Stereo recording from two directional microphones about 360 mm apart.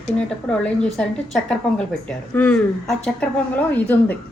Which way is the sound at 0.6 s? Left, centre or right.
Centre.